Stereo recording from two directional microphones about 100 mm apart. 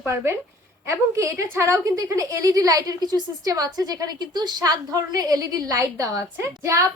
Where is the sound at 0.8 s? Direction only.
30° right (ahead or behind).